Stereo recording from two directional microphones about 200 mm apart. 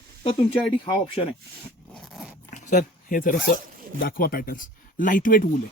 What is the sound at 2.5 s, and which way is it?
Speech, 40° left (ahead or behind).